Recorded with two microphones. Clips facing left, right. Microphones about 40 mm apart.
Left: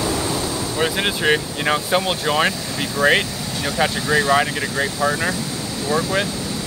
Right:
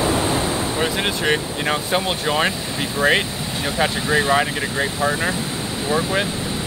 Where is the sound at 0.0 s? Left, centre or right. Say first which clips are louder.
Right 3 dB; right.